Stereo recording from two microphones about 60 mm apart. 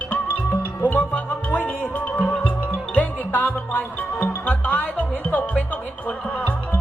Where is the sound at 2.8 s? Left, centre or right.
Left.